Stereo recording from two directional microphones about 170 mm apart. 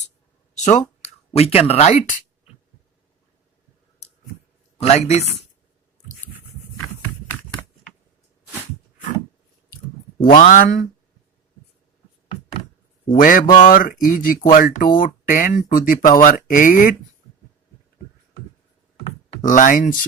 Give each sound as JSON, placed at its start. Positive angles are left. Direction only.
{"t": 0.5, "sound": "a sound", "side_deg": 45}
{"t": 1.0, "sound": "speech", "side_deg": 35}
{"t": 4.8, "sound": "speech", "side_deg": 40}
{"t": 10.2, "sound": "speech", "side_deg": 50}
{"t": 13.1, "sound": "speech", "side_deg": 55}
{"t": 19.4, "sound": "speech", "side_deg": 50}